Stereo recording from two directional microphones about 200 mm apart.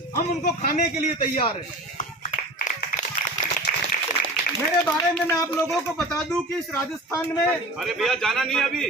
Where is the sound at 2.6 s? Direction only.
40° left (ahead or behind).